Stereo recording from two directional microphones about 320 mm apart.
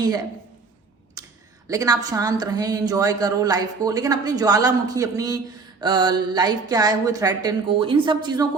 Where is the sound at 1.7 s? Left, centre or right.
Centre.